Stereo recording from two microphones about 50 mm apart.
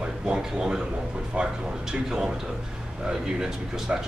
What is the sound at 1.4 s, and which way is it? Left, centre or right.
Speech, right.